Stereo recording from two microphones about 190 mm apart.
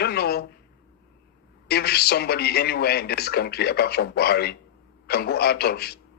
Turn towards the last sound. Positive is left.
turn(degrees=55)  # may be behind; listen again after turning